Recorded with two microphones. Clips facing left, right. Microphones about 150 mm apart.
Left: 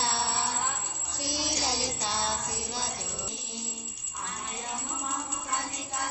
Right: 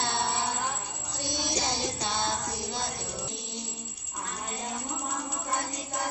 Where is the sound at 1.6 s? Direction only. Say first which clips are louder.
Right 1 dB; centre (ahead or behind).